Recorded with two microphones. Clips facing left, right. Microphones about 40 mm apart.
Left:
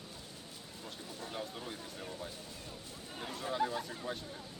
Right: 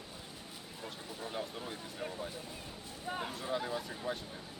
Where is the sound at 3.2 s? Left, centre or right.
Centre.